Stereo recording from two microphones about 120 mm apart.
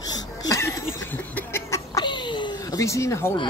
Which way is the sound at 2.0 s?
40° left (ahead or behind).